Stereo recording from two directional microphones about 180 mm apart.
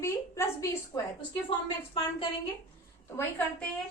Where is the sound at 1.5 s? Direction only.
30° left (ahead or behind).